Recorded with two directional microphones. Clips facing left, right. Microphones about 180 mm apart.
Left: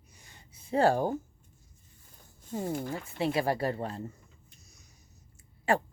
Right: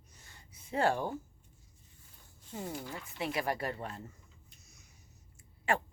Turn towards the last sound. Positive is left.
turn(degrees=35)  # may be behind; listen again after turning